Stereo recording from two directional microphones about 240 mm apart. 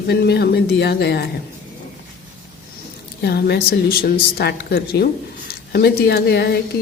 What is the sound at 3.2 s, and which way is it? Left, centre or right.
A woman's voice, left.